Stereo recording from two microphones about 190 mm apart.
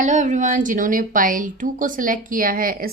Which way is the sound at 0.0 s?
40° right (ahead or behind).